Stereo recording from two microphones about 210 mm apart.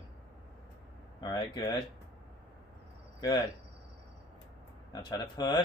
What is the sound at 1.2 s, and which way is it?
Speech, 20° left (ahead or behind).